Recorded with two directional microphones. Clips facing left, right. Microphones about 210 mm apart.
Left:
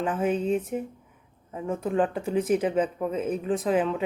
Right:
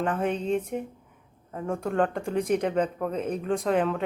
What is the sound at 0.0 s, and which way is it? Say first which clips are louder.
Speech: left 2 dB; 5° left (ahead or behind).